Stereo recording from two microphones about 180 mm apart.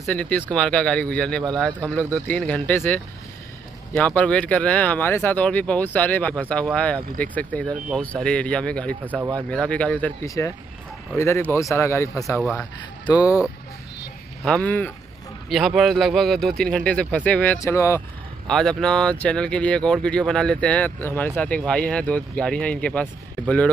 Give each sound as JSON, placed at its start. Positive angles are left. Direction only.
{"t": 0.0, "sound": "speech", "side_deg": 10}
{"t": 9.0, "sound": "speech", "side_deg": -10}
{"t": 9.5, "sound": "speech", "side_deg": 5}
{"t": 10.2, "sound": "speech", "side_deg": 20}
{"t": 14.4, "sound": "speech", "side_deg": 5}
{"t": 18.5, "sound": "speech", "side_deg": 5}